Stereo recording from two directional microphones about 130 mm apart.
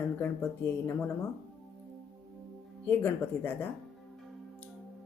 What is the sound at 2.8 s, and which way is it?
Speech, 15° left (ahead or behind).